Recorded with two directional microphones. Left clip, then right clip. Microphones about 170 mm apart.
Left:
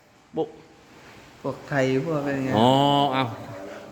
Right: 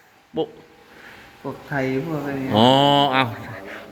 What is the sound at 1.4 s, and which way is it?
Speech, 35° left (ahead or behind).